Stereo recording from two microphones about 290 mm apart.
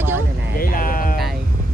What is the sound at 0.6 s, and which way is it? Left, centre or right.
Sheep, left.